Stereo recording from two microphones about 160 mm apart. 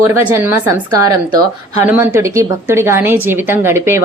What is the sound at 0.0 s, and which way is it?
Speech, 15° right (ahead or behind).